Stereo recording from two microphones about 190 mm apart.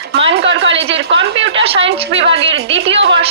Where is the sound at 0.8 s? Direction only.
30° right (ahead or behind).